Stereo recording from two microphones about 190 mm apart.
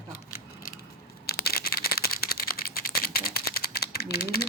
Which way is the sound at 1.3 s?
55° left (ahead or behind).